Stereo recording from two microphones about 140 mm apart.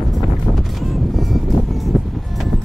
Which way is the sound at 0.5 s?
Centre (ahead or behind).